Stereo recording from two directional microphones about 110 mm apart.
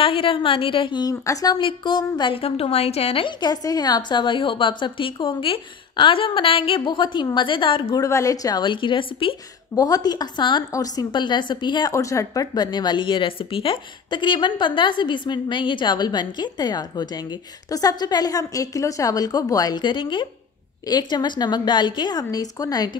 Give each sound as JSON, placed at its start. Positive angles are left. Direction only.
{"t": 0.0, "sound": "a woman's voice", "side_deg": 55}
{"t": 1.2, "sound": "a woman's voice", "side_deg": 30}
{"t": 1.6, "sound": "a woman's voice", "side_deg": 45}
{"t": 3.3, "sound": "a woman's voice", "side_deg": 40}
{"t": 8.0, "sound": "a woman's voice", "side_deg": 30}
{"t": 9.8, "sound": "a woman's voice", "side_deg": 35}
{"t": 11.9, "sound": "speech", "side_deg": 30}
{"t": 12.5, "sound": "a woman's voice", "side_deg": 40}